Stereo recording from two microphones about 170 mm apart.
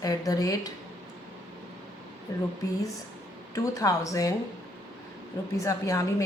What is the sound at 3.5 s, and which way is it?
Speech, 20° left (ahead or behind).